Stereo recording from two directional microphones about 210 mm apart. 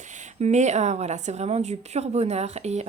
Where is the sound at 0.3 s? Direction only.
35° right (ahead or behind).